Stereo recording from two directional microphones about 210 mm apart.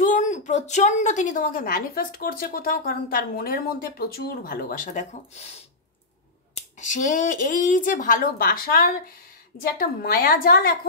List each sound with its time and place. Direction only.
0.0 s a woman's voice: 35° left (ahead or behind)
6.8 s a woman's voice: 35° left (ahead or behind)